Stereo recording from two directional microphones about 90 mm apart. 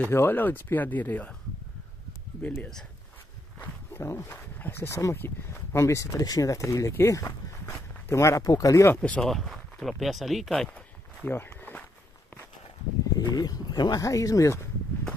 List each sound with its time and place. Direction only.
0.1 s speech: 25° left (ahead or behind)
2.4 s speech: 20° left (ahead or behind)
3.5 s wild animals: 25° left (ahead or behind)
4.6 s speech: 25° left (ahead or behind); by 8.8 s 40° left (ahead or behind)
9.0 s speech: 10° left (ahead or behind)
10.5 s speech: 10° left (ahead or behind)
11.2 s walk: 20° left (ahead or behind)
13.1 s speech: 45° left (ahead or behind)